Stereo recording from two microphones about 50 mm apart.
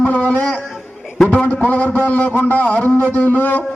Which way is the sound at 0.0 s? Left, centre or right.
Left.